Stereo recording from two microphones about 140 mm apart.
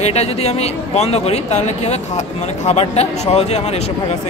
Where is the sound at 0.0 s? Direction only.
50° left (ahead or behind).